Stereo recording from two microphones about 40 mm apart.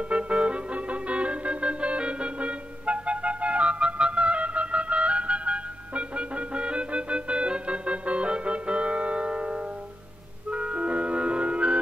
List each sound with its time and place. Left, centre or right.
0.1 s music: right